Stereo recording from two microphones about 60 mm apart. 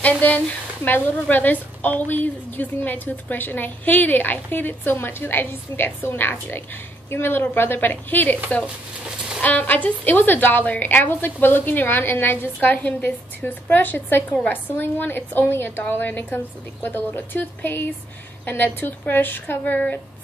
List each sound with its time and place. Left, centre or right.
0.0 s a woman's voice: left
9.4 s a woman's voice: left